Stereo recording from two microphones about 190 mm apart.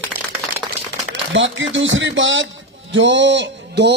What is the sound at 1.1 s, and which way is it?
A man's voice, 75° right (ahead or behind).